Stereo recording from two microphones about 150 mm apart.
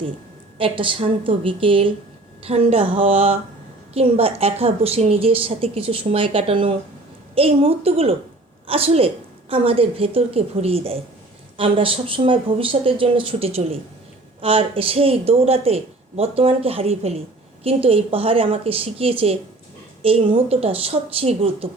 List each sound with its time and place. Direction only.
0.6 s a woman's voice: 35° right (ahead or behind)